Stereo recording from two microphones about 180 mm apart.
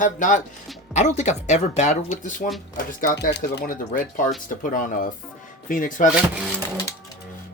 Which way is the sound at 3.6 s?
50° left (ahead or behind).